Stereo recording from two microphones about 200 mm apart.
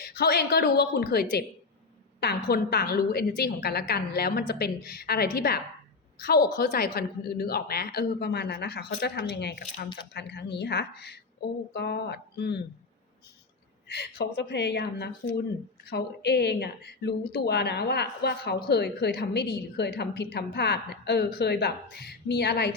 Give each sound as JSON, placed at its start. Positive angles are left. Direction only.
{"t": 0.1, "sound": "a woman's voice", "side_deg": 50}
{"t": 13.9, "sound": "speech", "side_deg": 55}